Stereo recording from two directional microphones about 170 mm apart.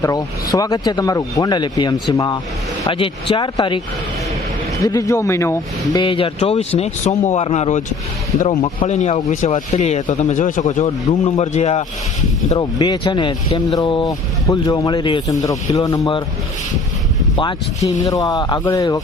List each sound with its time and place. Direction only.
0.0 s speech: 20° left (ahead or behind)
4.8 s speech: 20° left (ahead or behind)
6.0 s speech: 30° left (ahead or behind)
12.5 s speech: 25° left (ahead or behind)
17.3 s speech: 25° left (ahead or behind)